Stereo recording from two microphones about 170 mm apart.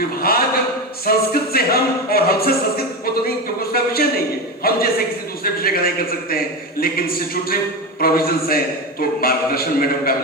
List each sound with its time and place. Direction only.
0.2 s a man's voice: 60° left (ahead or behind)